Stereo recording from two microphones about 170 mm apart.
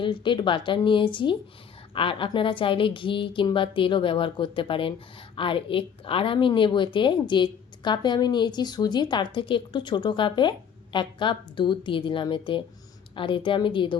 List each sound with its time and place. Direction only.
0.0 s a woman's voice: 30° left (ahead or behind)